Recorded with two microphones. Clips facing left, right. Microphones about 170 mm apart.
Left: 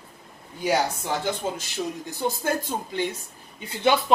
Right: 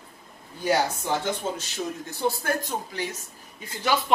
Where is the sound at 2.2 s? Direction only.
25° left (ahead or behind).